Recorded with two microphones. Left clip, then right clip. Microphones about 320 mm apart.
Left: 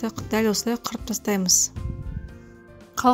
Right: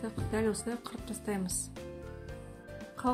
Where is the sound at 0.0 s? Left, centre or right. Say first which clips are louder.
Left 9 dB; left.